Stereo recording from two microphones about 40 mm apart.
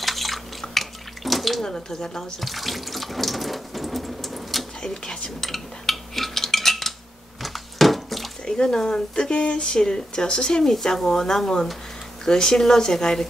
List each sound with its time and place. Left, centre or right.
0.0 s bathtub: centre
1.6 s speech: centre
2.4 s water tap: centre
4.8 s speech: centre
5.4 s a sound: centre
8.5 s speech: centre